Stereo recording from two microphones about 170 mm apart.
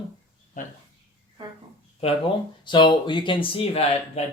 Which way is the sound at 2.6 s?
30° left (ahead or behind).